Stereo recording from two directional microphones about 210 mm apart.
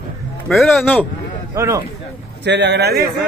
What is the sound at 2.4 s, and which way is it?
Speech, 55° right (ahead or behind).